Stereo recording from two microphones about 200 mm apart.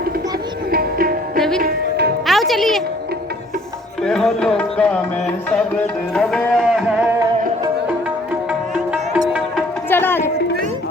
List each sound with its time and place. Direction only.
0.7 s music: 50° right (ahead or behind)
1.4 s music: 5° left (ahead or behind)
1.6 s music: 55° right (ahead or behind)
2.2 s music: centre (ahead or behind)
4.0 s music: centre (ahead or behind)
8.7 s music: 5° right (ahead or behind)
9.9 s music: 10° left (ahead or behind)